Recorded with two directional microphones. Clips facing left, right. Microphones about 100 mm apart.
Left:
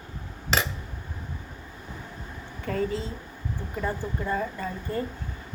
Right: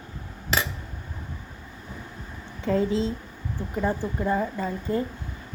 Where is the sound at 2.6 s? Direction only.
20° right (ahead or behind).